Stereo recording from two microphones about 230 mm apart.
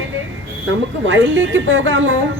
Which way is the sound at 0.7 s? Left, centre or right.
Right.